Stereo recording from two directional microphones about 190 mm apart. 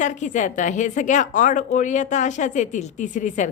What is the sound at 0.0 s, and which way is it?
A woman's voice, 40° left (ahead or behind).